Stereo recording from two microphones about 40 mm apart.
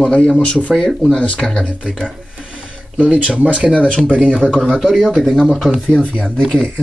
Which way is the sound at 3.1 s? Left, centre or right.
Right.